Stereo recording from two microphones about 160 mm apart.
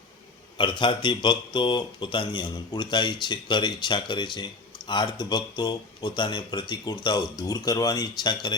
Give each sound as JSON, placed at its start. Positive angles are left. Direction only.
{"t": 0.6, "sound": "speech", "side_deg": 30}